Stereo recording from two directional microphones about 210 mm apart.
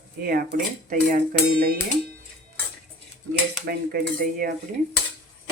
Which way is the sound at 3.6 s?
45° right (ahead or behind).